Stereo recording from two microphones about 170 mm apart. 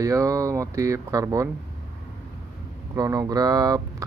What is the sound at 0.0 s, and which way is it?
Speech, 20° right (ahead or behind).